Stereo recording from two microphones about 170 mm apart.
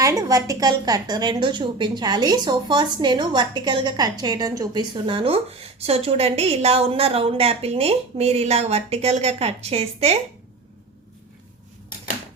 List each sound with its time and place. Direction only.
0.0 s a woman's voice: 20° right (ahead or behind); by 10.2 s 35° right (ahead or behind)